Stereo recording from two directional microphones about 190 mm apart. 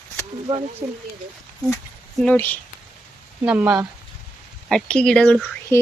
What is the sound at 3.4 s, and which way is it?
Speech, 5° right (ahead or behind).